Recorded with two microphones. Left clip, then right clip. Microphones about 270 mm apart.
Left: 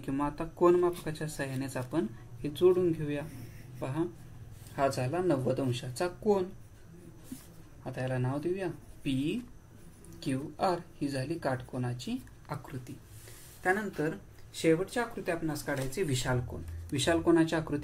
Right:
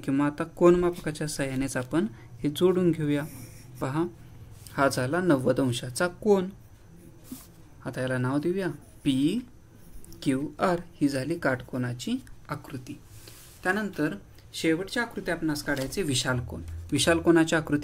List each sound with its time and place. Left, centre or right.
0.0 s speech: right
7.8 s speech: right
14.6 s speech: right